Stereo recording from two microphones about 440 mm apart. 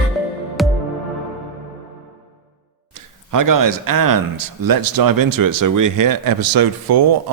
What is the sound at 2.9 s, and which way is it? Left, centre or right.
Speech, right.